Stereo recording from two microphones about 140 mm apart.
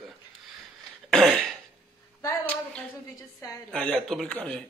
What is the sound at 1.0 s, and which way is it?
Throat clearing, centre (ahead or behind).